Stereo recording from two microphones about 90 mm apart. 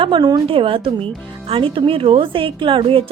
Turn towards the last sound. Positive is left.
turn(degrees=-85)